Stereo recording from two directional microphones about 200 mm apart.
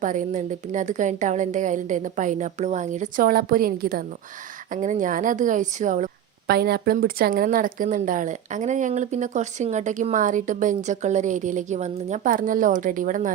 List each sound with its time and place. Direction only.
0.0 s a woman's voice: 40° right (ahead or behind)
6.5 s a woman's voice: 50° right (ahead or behind)